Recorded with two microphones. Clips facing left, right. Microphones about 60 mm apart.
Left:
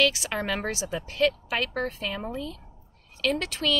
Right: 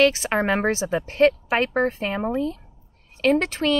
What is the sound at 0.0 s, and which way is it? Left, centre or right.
A woman's voice, right.